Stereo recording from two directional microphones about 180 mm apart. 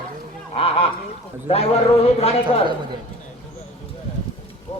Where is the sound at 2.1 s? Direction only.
35° left (ahead or behind).